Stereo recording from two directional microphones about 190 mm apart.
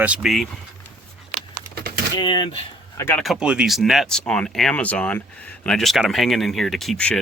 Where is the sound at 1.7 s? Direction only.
55° right (ahead or behind).